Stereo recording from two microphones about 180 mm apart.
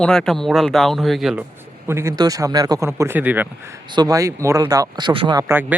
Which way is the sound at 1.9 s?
15° right (ahead or behind).